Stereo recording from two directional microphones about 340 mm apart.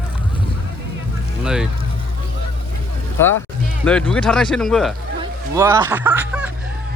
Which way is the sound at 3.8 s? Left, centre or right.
Centre.